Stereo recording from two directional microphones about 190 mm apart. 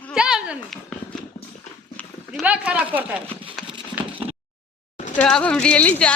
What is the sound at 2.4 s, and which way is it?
Speech, 5° right (ahead or behind).